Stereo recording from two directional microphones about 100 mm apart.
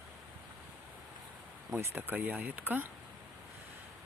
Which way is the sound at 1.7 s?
20° right (ahead or behind).